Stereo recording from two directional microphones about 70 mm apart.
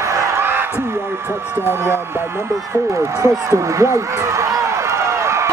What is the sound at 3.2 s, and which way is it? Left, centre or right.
Run, right.